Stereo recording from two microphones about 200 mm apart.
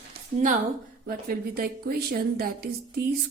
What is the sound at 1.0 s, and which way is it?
A woman's voice, 50° right (ahead or behind).